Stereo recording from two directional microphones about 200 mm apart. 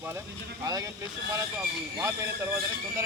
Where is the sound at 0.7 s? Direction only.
20° right (ahead or behind).